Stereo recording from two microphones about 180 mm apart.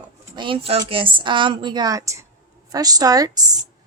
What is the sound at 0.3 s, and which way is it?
Speech, 30° right (ahead or behind).